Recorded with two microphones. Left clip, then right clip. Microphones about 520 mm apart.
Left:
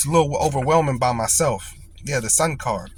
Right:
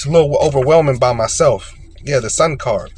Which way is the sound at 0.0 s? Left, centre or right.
Left.